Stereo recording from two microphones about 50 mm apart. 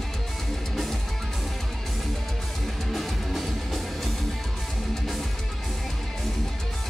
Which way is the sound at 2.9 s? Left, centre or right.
Centre.